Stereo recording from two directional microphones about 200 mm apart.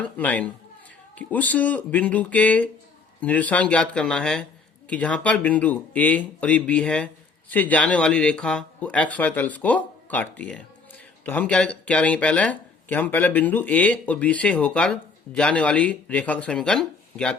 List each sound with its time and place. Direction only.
0.0 s speech: 10° left (ahead or behind)